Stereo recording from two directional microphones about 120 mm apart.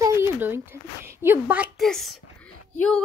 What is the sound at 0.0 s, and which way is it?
A child's voice, 20° right (ahead or behind).